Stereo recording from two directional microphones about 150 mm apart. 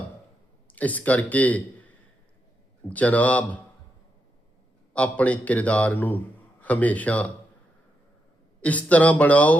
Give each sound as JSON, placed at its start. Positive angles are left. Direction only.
{"t": 0.7, "sound": "a man's voice", "side_deg": 10}
{"t": 2.9, "sound": "a man's voice", "side_deg": 10}
{"t": 4.9, "sound": "a man's voice", "side_deg": 10}
{"t": 8.6, "sound": "a man's voice", "side_deg": 10}